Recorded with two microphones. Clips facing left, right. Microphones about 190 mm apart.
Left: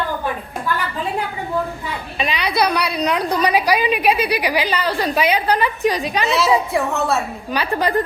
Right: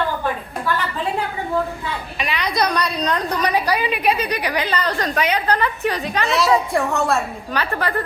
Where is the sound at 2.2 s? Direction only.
15° left (ahead or behind).